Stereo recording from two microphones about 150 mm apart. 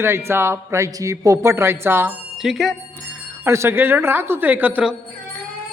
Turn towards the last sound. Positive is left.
turn(degrees=-10)  # may be behind; listen again after turning